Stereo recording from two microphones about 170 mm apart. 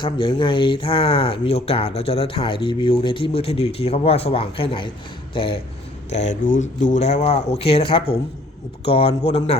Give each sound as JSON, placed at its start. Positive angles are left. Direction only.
{"t": 0.0, "sound": "speech", "side_deg": 30}
{"t": 6.1, "sound": "speech", "side_deg": 40}